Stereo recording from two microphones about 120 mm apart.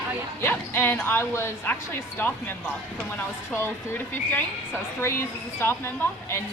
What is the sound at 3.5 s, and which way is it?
A woman's voice, 20° left (ahead or behind).